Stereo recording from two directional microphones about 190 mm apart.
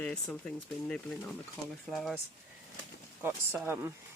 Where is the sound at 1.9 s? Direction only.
Centre (ahead or behind).